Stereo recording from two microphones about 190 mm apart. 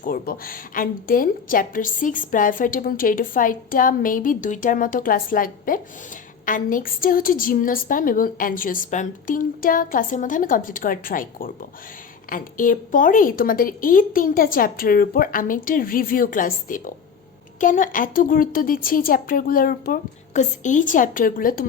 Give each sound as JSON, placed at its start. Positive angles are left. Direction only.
{"t": 0.0, "sound": "a woman's voice", "side_deg": 50}